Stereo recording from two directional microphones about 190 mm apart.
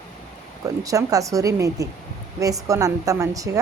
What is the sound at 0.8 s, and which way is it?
Speech, 15° right (ahead or behind).